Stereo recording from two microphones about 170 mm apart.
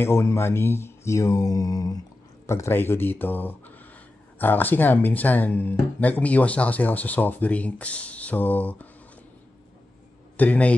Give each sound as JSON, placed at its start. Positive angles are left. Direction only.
{"t": 0.0, "sound": "speech", "side_deg": 15}
{"t": 10.3, "sound": "a man's voice", "side_deg": 10}